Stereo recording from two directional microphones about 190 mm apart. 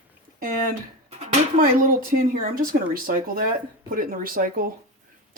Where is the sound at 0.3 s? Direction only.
45° right (ahead or behind).